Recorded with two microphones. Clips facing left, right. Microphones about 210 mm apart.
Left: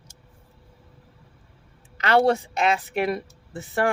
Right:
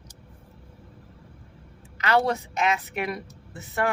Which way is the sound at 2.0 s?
30° left (ahead or behind).